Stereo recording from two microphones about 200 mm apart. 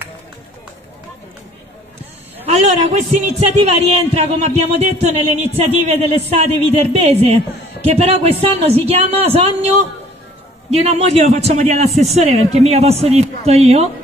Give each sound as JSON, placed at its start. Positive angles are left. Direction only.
{"t": 2.4, "sound": "a man's voice", "side_deg": -35}